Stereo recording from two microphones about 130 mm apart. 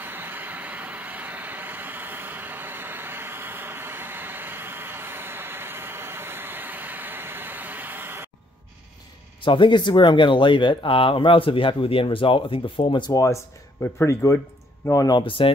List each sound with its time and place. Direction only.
0.0 s vehicle: 15° right (ahead or behind)
9.4 s speech: 40° left (ahead or behind)
15.2 s speech: 40° left (ahead or behind)